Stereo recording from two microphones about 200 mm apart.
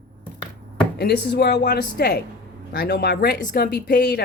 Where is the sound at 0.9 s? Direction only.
55° left (ahead or behind).